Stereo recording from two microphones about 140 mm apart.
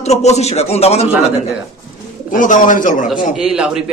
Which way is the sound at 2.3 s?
70° left (ahead or behind).